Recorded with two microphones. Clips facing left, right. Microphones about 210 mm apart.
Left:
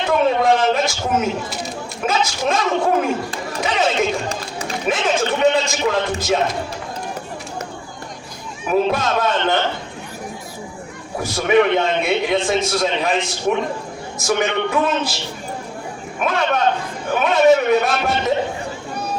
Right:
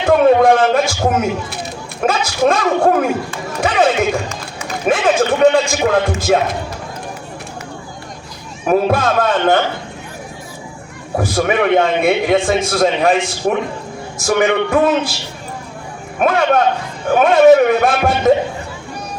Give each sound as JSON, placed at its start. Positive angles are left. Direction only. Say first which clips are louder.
{"t": 0.0, "sound": "a man's voice", "louder": "right 7 dB", "side_deg": -50}
{"t": 3.6, "sound": "chatter", "louder": "right 5 dB", "side_deg": -55}
{"t": 4.9, "sound": "a sound", "louder": "right 6 dB", "side_deg": -50}
{"t": 8.6, "sound": "a man's voice", "louder": "right 4 dB", "side_deg": -50}
{"t": 11.2, "sound": "a man's voice", "louder": "even", "side_deg": -55}
{"t": 16.2, "sound": "a man's voice", "louder": "right 5 dB", "side_deg": -50}